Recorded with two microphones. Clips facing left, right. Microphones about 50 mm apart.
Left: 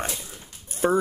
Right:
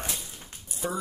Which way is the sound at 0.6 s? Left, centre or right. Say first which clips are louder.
Left 10 dB; left.